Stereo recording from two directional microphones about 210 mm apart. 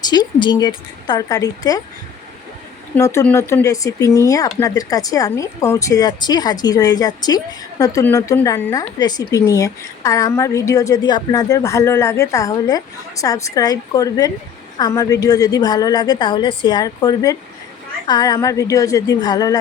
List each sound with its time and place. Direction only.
0.0 s a woman's voice: 20° left (ahead or behind)
2.9 s a woman's voice: 10° left (ahead or behind)